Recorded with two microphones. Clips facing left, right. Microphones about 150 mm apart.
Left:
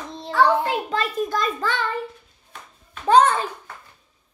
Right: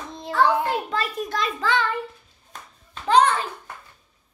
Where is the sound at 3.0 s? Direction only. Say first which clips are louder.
Left 2 dB; 45° left (ahead or behind).